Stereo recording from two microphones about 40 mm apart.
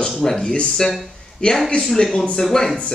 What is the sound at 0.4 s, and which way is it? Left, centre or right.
Speech, left.